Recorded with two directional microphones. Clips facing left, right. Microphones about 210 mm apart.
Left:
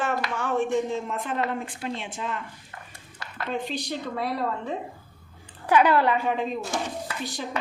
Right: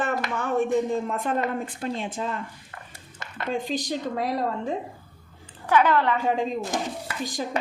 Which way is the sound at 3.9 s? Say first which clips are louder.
Right 2 dB; 45° right (ahead or behind).